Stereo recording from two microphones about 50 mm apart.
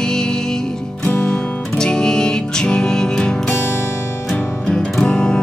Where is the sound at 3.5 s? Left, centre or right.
Left.